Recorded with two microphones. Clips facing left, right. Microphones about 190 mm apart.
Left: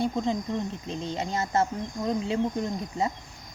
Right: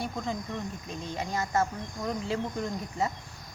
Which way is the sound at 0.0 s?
20° left (ahead or behind).